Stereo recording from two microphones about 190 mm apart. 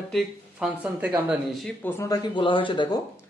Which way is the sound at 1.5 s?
5° left (ahead or behind).